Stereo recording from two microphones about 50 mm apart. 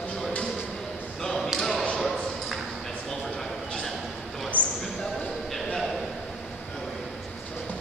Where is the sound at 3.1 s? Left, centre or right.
Centre.